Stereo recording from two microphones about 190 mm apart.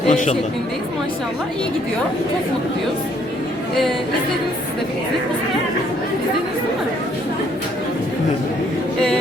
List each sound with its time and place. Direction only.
0.1 s speech: 40° left (ahead or behind)